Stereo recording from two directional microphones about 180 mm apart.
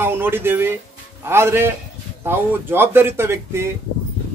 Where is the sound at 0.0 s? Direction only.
10° right (ahead or behind).